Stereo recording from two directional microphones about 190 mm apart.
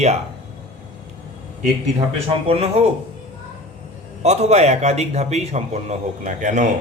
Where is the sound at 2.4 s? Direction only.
30° right (ahead or behind).